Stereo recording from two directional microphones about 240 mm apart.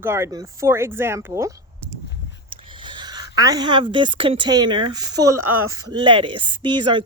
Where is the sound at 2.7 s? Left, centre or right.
Centre.